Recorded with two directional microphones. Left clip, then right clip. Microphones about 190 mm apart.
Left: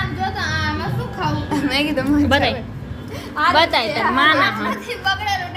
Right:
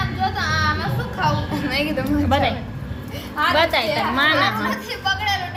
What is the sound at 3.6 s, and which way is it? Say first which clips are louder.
Speech: left 2 dB; 10° left (ahead or behind).